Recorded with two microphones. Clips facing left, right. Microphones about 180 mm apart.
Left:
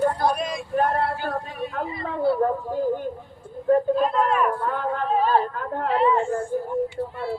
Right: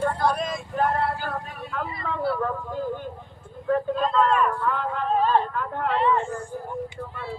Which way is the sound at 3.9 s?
10° left (ahead or behind).